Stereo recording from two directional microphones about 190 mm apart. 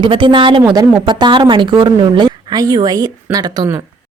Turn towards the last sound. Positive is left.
turn(degrees=-20)  # may be behind; listen again after turning